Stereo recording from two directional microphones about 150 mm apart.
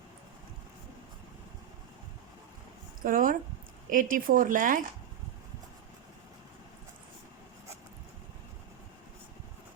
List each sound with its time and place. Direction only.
3.0 s a woman's voice: 65° right (ahead or behind)